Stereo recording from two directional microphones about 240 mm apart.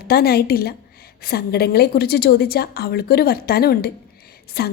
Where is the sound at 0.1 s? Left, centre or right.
Left.